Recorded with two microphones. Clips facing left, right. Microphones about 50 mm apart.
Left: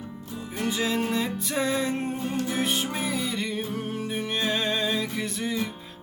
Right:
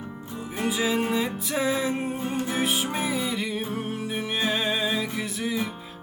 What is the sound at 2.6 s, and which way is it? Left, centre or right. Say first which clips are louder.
Music: right 1 dB; centre.